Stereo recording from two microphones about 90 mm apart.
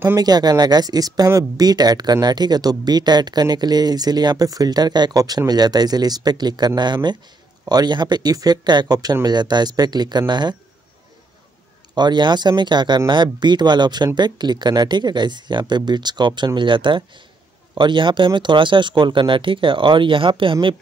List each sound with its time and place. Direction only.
0.2 s speech: 50° right (ahead or behind)
11.9 s speech: 55° right (ahead or behind); by 20.5 s 70° right (ahead or behind)